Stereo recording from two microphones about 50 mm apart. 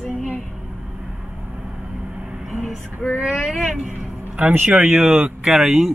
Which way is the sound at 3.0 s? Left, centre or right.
Left.